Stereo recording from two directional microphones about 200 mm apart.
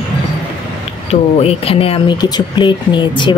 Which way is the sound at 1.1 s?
30° left (ahead or behind).